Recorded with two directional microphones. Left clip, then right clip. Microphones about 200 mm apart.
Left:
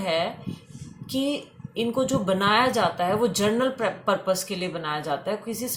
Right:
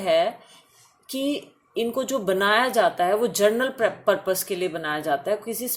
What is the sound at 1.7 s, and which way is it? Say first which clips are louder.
Speech: even; 40° right (ahead or behind).